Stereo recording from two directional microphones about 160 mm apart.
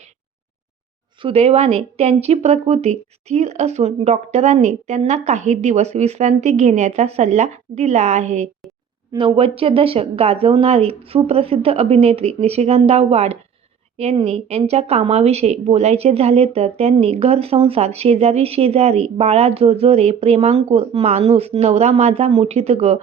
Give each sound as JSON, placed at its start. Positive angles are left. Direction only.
{"t": 1.2, "sound": "speech", "side_deg": -40}
{"t": 9.1, "sound": "a woman's voice", "side_deg": -35}